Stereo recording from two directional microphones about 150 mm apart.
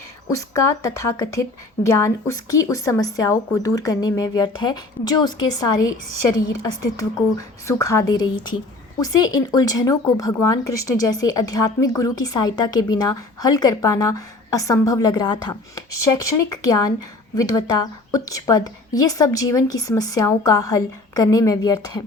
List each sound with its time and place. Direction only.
0.3 s a woman's voice: 20° left (ahead or behind)